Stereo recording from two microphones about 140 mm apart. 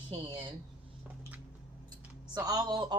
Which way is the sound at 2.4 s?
30° right (ahead or behind).